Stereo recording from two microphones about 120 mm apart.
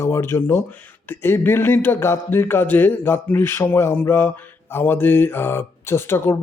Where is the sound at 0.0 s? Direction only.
20° left (ahead or behind).